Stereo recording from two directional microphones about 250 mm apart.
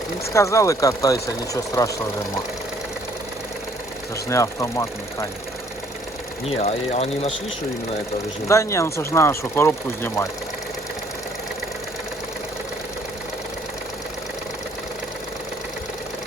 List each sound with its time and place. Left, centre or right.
0.3 s speech: centre
4.3 s speech: centre
6.5 s speech: left
8.4 s speech: centre